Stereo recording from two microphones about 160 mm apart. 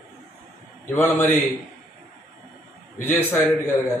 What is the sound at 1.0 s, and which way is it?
Speech, 10° left (ahead or behind).